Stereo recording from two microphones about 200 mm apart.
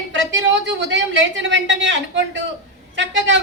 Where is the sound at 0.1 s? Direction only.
65° right (ahead or behind).